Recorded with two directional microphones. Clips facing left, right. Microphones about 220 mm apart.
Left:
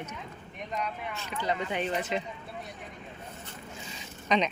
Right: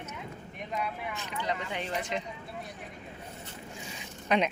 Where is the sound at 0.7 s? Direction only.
10° right (ahead or behind).